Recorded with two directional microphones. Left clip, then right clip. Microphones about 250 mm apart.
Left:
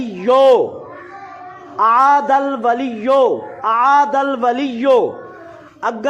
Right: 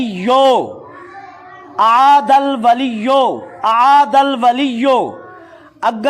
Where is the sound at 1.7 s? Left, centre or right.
Right.